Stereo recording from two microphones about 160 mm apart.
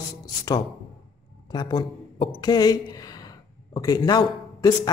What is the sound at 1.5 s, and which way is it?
A woman's voice, 25° left (ahead or behind).